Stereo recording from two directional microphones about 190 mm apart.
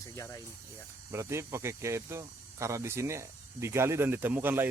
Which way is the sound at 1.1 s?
15° right (ahead or behind).